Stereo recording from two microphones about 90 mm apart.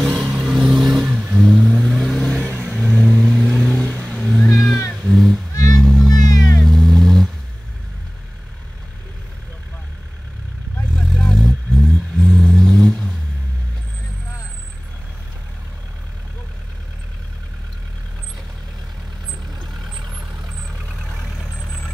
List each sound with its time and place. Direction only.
0.0 s vehicle: centre (ahead or behind)
1.7 s vehicle: 5° left (ahead or behind)
2.2 s vehicle: 15° left (ahead or behind)
2.7 s vehicle: 5° left (ahead or behind)
3.5 s vehicle: 5° right (ahead or behind)
3.8 s vehicle: 20° left (ahead or behind)
4.3 s cat: centre (ahead or behind)
5.1 s music: 5° left (ahead or behind)
6.1 s vehicle: 45° left (ahead or behind)
6.6 s vehicle: centre (ahead or behind)
11.0 s vehicle: 10° left (ahead or behind)